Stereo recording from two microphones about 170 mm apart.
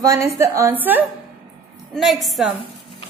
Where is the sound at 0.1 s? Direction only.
20° right (ahead or behind).